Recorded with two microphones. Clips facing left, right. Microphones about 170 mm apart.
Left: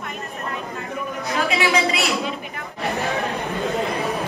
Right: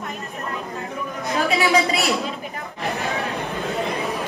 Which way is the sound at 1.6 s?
40° right (ahead or behind).